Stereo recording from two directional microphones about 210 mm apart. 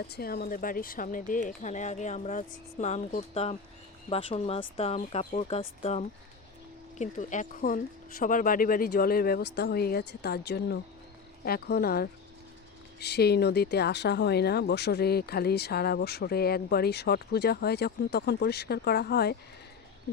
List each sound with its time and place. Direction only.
0.0 s speech: 45° left (ahead or behind)